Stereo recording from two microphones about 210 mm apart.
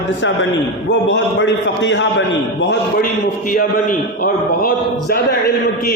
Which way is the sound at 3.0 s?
40° left (ahead or behind).